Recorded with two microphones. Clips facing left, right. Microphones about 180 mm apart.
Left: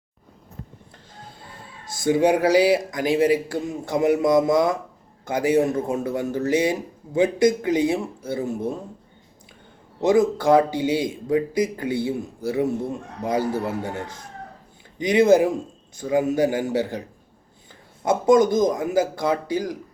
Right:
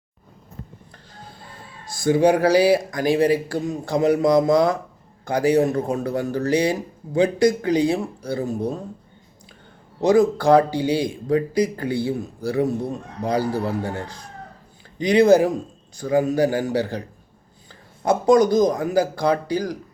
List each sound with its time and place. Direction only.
1.8 s a man's voice: 20° left (ahead or behind)
10.0 s a man's voice: 20° left (ahead or behind)
18.0 s a man's voice: 20° left (ahead or behind)